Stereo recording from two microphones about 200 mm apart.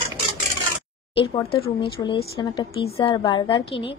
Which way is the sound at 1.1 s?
25° left (ahead or behind).